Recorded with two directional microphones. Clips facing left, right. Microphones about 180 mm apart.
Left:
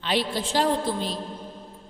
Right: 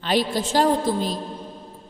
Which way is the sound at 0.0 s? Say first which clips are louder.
Right 4 dB; 45° right (ahead or behind).